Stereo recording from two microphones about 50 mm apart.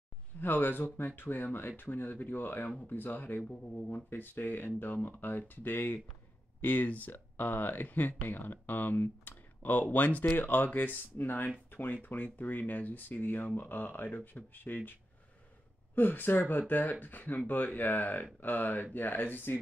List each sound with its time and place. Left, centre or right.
0.4 s speech: left
15.9 s speech: left